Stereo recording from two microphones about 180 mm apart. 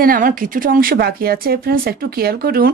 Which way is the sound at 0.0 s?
50° right (ahead or behind).